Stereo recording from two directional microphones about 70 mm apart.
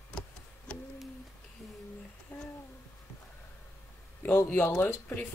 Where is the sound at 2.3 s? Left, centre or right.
Left.